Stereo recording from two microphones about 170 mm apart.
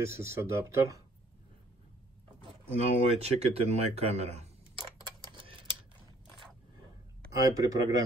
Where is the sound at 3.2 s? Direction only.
40° right (ahead or behind).